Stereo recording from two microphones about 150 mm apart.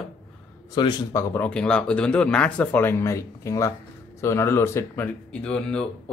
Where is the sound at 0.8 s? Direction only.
30° left (ahead or behind).